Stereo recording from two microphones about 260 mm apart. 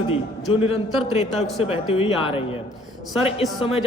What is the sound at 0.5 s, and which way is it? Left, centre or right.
Speech, left.